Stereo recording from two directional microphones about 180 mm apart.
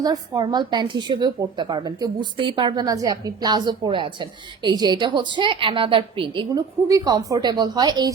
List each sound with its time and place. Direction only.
0.0 s a woman's voice: 20° right (ahead or behind)